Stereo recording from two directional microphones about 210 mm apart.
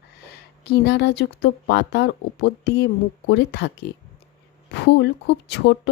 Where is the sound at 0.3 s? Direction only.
50° left (ahead or behind).